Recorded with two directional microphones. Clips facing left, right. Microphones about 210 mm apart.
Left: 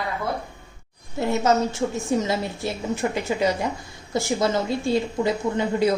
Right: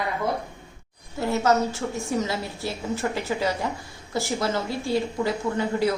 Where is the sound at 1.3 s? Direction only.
20° left (ahead or behind).